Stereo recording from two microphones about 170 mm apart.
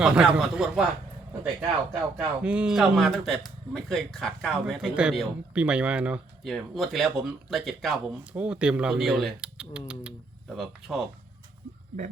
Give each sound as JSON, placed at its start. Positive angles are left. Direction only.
{"t": 0.0, "sound": "speech", "side_deg": -5}
{"t": 1.9, "sound": "speech", "side_deg": -5}